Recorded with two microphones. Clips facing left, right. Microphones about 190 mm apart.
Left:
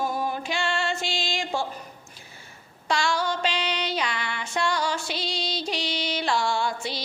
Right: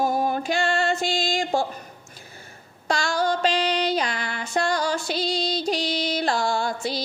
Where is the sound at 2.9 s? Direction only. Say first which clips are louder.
Right 2 dB; 40° right (ahead or behind).